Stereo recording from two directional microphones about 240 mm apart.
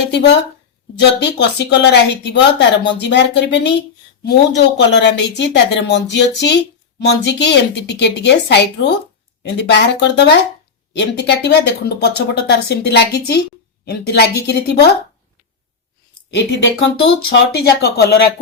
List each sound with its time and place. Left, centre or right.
0.1 s a woman's voice: left
17.0 s speech: left